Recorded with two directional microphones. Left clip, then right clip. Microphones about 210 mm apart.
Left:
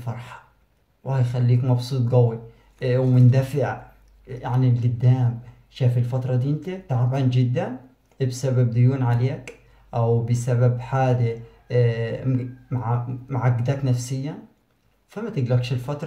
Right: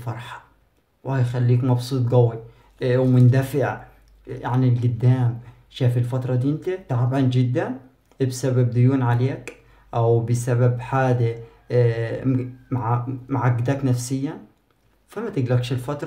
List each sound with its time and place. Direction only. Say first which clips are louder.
0.0 s speech: right 3 dB; 40° right (ahead or behind)